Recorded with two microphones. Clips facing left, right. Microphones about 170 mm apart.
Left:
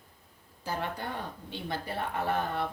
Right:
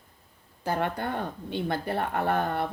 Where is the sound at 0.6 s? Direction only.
60° right (ahead or behind).